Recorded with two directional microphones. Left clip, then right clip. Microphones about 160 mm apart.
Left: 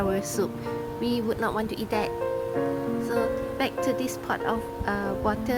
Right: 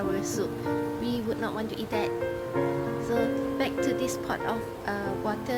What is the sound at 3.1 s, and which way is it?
Speech, 45° left (ahead or behind).